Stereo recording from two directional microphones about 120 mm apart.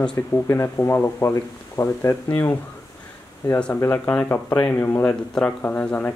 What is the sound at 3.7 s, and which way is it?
Speech, 20° left (ahead or behind).